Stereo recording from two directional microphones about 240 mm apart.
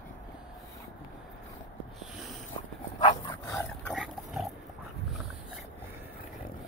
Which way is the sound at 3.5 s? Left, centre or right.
Centre.